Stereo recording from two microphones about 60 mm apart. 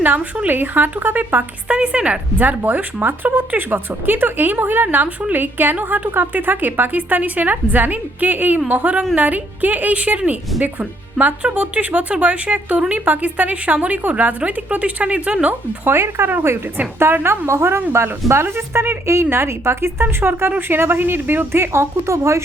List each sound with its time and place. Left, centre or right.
0.0 s speech: right
1.6 s speech: centre
15.8 s a woman's voice: right